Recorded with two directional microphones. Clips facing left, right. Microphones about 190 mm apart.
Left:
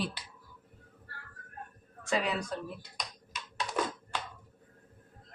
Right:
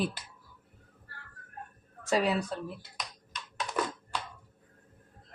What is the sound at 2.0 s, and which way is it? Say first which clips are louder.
Speech: right 4 dB; 40° right (ahead or behind).